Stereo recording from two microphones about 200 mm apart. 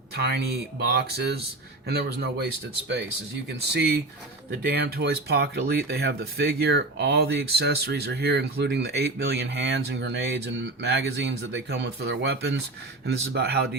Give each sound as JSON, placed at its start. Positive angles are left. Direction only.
{"t": 0.2, "sound": "speech", "side_deg": -55}
{"t": 3.8, "sound": "speech", "side_deg": -55}